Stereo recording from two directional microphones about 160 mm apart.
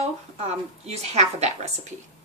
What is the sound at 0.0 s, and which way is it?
A woman's voice, 40° right (ahead or behind).